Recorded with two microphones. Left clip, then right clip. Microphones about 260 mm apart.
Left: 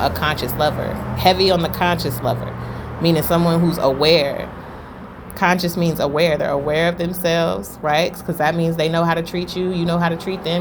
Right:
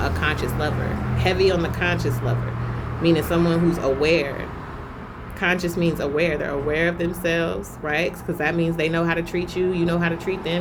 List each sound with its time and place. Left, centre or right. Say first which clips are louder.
0.0 s speech: left 4 dB; centre